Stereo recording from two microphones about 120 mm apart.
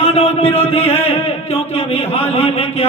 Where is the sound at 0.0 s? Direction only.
60° left (ahead or behind).